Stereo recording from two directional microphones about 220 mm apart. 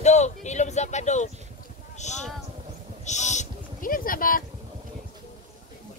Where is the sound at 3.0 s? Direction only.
30° left (ahead or behind).